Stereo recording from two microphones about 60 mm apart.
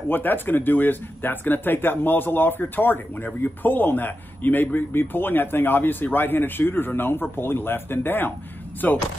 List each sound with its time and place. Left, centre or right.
0.1 s speech: left